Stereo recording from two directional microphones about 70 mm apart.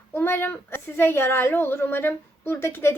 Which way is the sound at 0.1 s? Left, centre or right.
Left.